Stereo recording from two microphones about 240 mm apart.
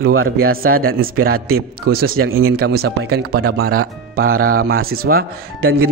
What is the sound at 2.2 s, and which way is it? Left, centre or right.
Speech, right.